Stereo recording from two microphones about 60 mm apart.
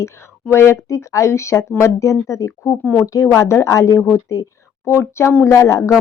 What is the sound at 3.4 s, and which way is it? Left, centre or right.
Speech, left.